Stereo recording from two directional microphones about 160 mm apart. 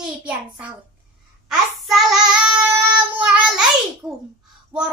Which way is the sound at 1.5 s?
Centre (ahead or behind).